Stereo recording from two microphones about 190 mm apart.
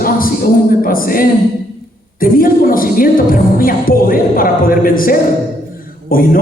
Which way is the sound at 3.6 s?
50° left (ahead or behind).